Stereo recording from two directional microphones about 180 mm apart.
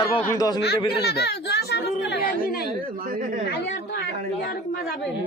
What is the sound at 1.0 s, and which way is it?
Speech, 65° left (ahead or behind).